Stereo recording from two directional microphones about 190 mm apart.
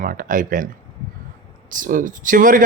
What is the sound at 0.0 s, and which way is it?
Speech, 45° right (ahead or behind).